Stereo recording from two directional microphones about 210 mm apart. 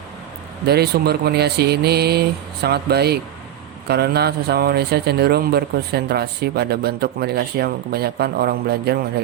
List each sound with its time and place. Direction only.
0.6 s speech: 50° right (ahead or behind)